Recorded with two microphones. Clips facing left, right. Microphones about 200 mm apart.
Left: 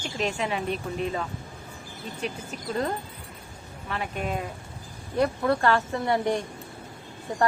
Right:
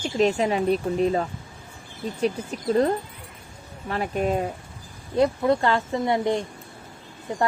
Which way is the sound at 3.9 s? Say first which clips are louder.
Right 6 dB; 40° right (ahead or behind).